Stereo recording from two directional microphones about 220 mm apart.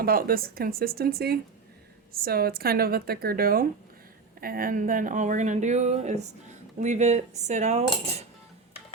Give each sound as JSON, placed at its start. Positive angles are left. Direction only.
{"t": 0.0, "sound": "a woman's voice", "side_deg": -45}